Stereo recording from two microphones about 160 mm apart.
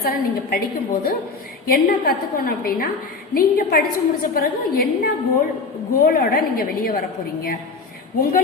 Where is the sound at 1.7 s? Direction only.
65° left (ahead or behind).